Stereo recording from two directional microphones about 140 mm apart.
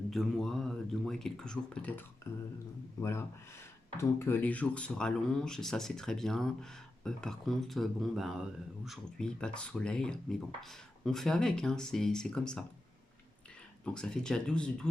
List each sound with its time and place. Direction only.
0.1 s speech: 5° left (ahead or behind)
2.3 s a sound: 20° left (ahead or behind)
3.0 s speech: 20° left (ahead or behind)
13.8 s speech: 5° left (ahead or behind)